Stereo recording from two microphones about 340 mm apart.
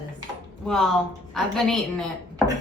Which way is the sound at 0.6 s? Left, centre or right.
Centre.